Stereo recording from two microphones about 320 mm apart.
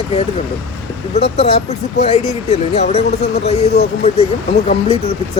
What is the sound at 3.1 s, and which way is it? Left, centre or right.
Speech, left.